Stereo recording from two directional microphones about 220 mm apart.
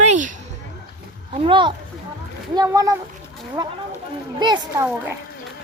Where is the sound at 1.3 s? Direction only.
25° right (ahead or behind).